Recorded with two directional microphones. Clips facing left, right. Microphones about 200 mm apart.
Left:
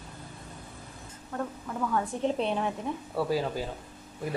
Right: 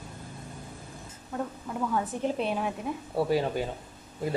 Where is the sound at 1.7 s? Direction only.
10° right (ahead or behind).